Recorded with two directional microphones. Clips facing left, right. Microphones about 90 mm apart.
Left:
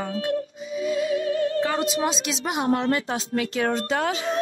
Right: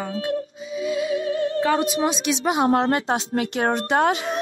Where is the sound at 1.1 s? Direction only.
25° right (ahead or behind).